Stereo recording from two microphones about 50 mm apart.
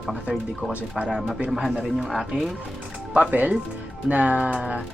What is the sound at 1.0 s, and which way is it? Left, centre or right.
Speech, centre.